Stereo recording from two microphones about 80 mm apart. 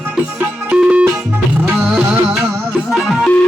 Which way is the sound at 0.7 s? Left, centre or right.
Centre.